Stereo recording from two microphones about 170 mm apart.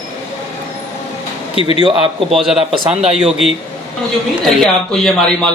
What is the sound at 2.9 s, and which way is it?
Speech, 35° right (ahead or behind).